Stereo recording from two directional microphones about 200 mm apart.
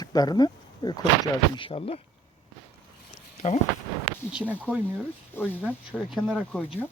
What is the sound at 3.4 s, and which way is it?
Speech, 35° left (ahead or behind).